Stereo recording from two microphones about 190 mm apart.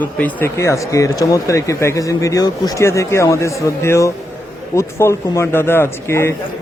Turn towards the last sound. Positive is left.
turn(degrees=15)  # may be behind; listen again after turning